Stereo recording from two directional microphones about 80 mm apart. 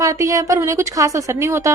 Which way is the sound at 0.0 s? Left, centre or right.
Right.